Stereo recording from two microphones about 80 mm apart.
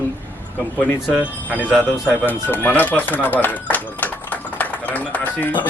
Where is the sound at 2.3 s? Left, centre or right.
Left.